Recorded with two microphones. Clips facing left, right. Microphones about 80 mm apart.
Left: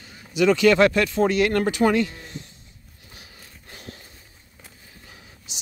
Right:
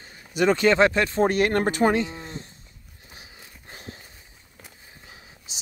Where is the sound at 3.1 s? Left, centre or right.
Right.